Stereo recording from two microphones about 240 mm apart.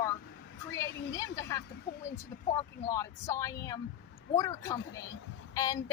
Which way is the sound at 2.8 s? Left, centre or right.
Centre.